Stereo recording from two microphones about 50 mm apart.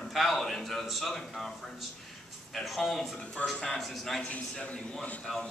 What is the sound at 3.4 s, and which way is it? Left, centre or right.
Speech, left.